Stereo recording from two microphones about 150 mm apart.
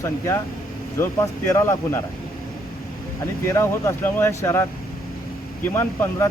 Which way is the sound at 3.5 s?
15° left (ahead or behind).